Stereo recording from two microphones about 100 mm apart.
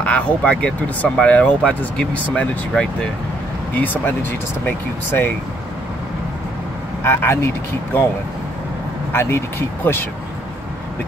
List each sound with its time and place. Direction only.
0.0 s speech: 15° left (ahead or behind)
7.0 s speech: 25° left (ahead or behind)
9.1 s speech: 25° left (ahead or behind)